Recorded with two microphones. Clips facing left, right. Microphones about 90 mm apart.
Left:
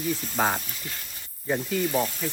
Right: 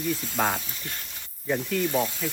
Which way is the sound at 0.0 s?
Centre (ahead or behind).